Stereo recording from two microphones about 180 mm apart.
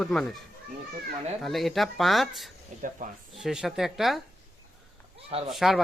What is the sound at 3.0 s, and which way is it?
Speech, 50° right (ahead or behind).